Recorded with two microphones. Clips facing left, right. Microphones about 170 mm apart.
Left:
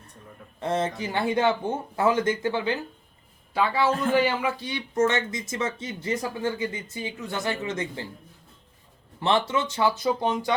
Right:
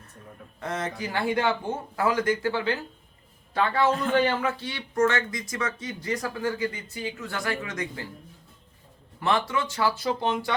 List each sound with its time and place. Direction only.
0.6 s a man's voice: 30° left (ahead or behind)
9.2 s a man's voice: 25° left (ahead or behind)